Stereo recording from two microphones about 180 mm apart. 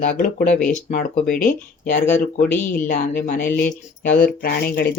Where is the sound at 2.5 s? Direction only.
10° left (ahead or behind).